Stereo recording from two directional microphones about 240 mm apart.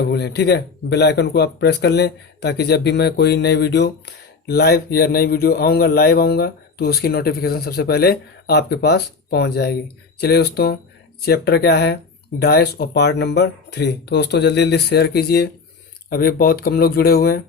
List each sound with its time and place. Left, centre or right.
0.1 s speech: left